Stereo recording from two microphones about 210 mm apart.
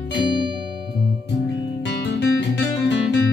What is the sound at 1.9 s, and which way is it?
Guitar, 55° left (ahead or behind).